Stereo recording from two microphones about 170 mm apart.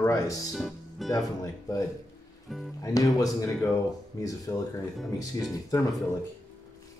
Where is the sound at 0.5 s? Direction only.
Centre (ahead or behind).